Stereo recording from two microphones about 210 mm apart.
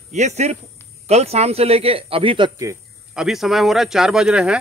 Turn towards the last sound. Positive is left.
turn(degrees=-5)  # may be behind; listen again after turning